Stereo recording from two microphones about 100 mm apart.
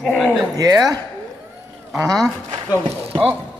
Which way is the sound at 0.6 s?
40° right (ahead or behind).